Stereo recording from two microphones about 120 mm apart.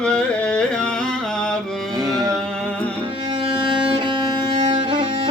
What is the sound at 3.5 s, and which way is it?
Music, 45° right (ahead or behind).